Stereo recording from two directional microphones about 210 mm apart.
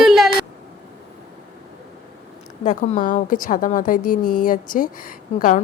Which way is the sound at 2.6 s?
35° left (ahead or behind).